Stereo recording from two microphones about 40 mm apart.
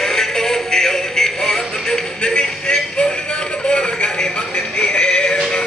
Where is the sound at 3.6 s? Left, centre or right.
Left.